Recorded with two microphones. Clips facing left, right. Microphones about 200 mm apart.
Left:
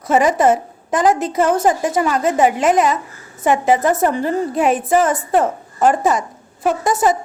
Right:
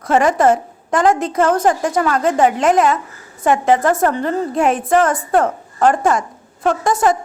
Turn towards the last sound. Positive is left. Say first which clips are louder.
# even
turn(degrees=20)  # may be behind; listen again after turning